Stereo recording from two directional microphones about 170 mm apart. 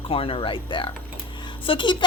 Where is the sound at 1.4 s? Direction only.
30° left (ahead or behind).